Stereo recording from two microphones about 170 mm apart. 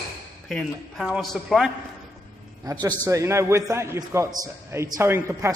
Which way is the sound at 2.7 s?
20° right (ahead or behind).